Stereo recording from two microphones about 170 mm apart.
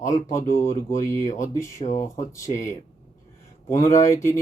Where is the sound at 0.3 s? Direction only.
15° left (ahead or behind).